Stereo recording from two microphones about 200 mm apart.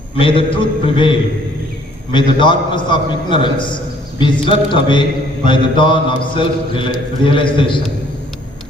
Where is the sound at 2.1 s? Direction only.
25° left (ahead or behind).